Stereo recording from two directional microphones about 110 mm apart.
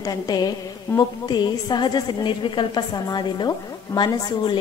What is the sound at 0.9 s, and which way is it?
Speech, 15° left (ahead or behind).